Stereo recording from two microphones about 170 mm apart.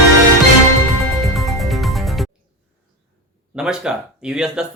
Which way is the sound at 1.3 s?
Centre (ahead or behind).